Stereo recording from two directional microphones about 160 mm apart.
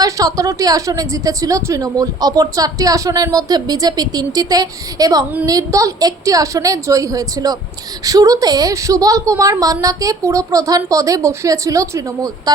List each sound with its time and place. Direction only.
0.0 s a woman's voice: 20° right (ahead or behind)